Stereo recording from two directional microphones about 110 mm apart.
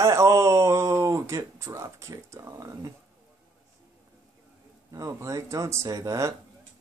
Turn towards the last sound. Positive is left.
turn(degrees=-30)  # may be behind; listen again after turning